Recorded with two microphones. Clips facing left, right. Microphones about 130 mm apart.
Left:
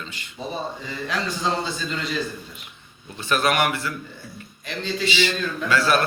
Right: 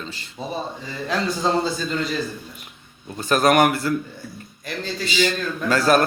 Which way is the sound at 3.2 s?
40° right (ahead or behind).